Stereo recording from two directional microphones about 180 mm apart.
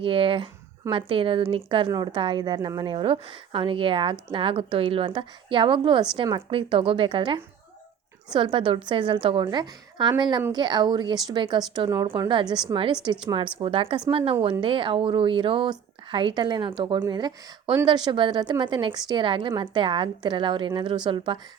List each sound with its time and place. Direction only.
0.0 s a woman's voice: 30° right (ahead or behind)